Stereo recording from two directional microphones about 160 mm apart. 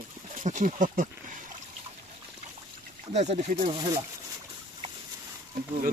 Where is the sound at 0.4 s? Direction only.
50° right (ahead or behind).